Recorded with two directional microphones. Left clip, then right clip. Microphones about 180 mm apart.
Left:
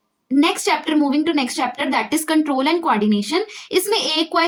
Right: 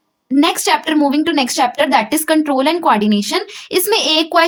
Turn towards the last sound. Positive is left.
turn(degrees=-35)  # may be behind; listen again after turning